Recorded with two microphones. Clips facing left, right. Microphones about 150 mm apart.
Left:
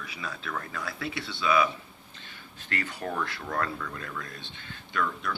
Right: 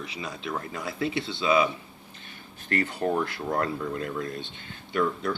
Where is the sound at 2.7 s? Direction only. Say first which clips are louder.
Right 7 dB; 25° right (ahead or behind).